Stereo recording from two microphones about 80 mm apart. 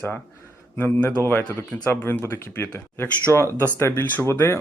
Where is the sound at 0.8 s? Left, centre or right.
Left.